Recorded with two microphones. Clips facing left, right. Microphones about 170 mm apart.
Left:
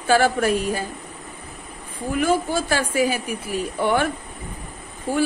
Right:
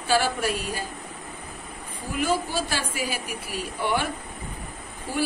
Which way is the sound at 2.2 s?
50° left (ahead or behind).